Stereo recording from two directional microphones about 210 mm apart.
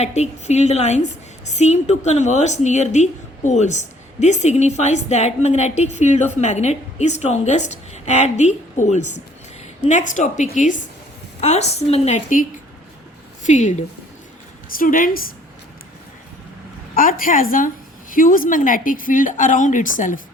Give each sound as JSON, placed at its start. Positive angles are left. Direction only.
{"t": 0.0, "sound": "a woman's voice", "side_deg": 30}
{"t": 16.9, "sound": "a woman's voice", "side_deg": 40}